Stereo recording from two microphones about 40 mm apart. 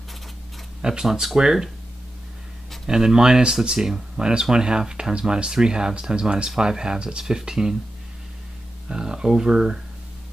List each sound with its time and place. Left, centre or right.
0.8 s speech: centre
2.9 s speech: centre
8.8 s speech: centre